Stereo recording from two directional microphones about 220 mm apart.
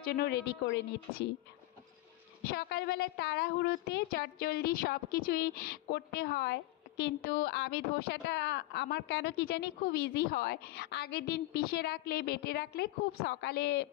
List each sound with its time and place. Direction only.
0.0 s a woman's voice: 45° left (ahead or behind)
2.4 s a woman's voice: 45° left (ahead or behind)